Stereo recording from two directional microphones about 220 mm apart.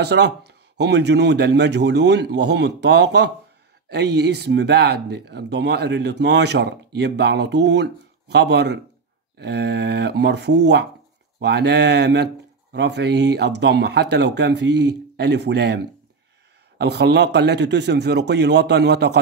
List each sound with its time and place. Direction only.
0.0 s speech: 50° right (ahead or behind)